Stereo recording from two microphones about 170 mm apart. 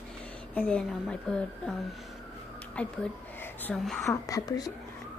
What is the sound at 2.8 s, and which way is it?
A woman's voice, 5° left (ahead or behind).